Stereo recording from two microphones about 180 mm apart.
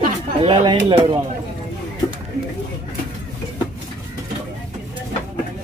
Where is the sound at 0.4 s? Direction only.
30° right (ahead or behind).